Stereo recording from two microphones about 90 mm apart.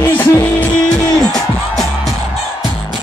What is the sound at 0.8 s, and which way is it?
Speech, 10° left (ahead or behind).